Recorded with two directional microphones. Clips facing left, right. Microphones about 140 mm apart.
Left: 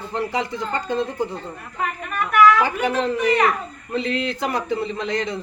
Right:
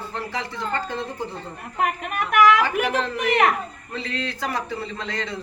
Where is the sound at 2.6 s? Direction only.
20° left (ahead or behind).